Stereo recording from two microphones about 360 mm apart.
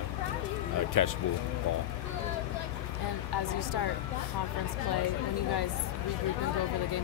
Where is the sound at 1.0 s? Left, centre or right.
Left.